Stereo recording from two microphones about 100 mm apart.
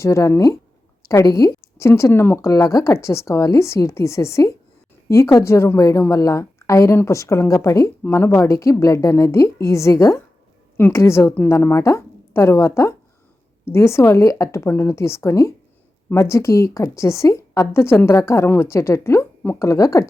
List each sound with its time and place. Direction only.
0.0 s a woman's voice: 30° left (ahead or behind)